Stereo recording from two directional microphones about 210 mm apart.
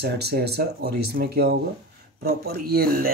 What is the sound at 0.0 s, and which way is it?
Speech, 50° right (ahead or behind).